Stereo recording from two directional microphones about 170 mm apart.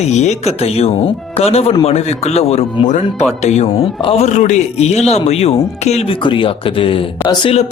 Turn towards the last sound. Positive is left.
turn(degrees=35)  # may be behind; listen again after turning